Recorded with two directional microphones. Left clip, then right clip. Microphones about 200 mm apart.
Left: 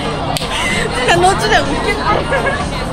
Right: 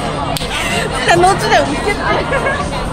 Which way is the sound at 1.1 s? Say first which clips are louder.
Right 1 dB; 45° right (ahead or behind).